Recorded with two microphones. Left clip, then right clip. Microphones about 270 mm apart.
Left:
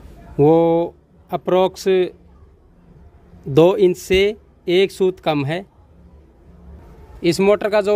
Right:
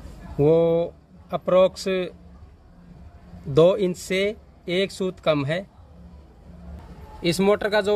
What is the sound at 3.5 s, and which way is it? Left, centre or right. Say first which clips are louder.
Speech: left 5 dB; left.